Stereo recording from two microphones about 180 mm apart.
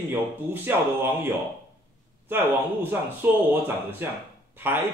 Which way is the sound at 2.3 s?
10° right (ahead or behind).